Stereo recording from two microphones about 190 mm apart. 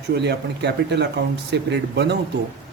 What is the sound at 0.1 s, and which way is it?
Speech, 60° right (ahead or behind).